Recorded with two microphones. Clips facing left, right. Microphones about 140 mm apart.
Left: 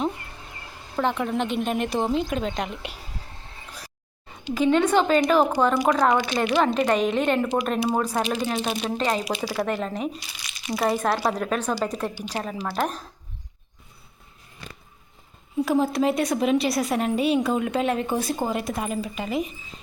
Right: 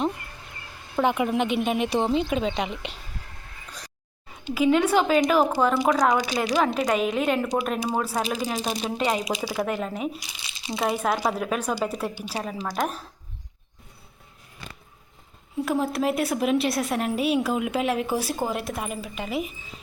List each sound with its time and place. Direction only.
0.9 s a woman's voice: 10° right (ahead or behind)
4.5 s a woman's voice: 5° right (ahead or behind)
10.4 s crumpling: 25° right (ahead or behind)
10.8 s speech: 10° right (ahead or behind)
15.6 s a woman's voice: centre (ahead or behind)